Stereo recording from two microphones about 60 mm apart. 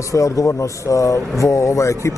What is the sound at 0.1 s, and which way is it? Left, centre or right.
A man's voice, left.